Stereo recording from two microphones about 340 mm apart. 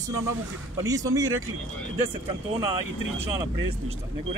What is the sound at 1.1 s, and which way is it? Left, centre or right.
Speech, right.